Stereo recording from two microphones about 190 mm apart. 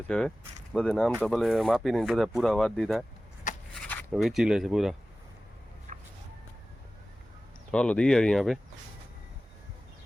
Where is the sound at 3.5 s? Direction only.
40° left (ahead or behind).